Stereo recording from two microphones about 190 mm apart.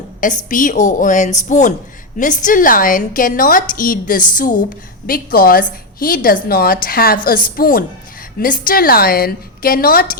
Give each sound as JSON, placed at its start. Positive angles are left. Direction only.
{"t": 0.2, "sound": "a woman's voice", "side_deg": 45}